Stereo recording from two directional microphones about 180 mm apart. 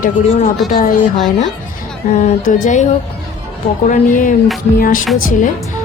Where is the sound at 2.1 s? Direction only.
45° left (ahead or behind).